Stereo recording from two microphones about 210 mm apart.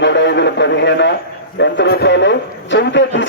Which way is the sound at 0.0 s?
55° left (ahead or behind).